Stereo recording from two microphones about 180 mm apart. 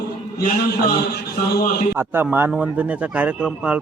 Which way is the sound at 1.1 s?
60° left (ahead or behind).